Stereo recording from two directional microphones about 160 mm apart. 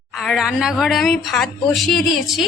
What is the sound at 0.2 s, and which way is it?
A woman's voice, centre (ahead or behind).